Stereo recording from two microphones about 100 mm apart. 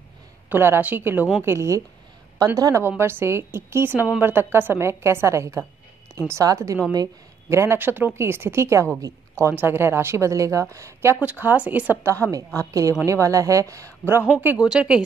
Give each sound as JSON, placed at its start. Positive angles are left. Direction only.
{"t": 0.5, "sound": "speech", "side_deg": -20}
{"t": 2.3, "sound": "speech", "side_deg": -40}
{"t": 3.0, "sound": "speech", "side_deg": -25}
{"t": 11.1, "sound": "speech", "side_deg": -15}
{"t": 12.1, "sound": "speech", "side_deg": -35}
{"t": 14.6, "sound": "speech", "side_deg": -10}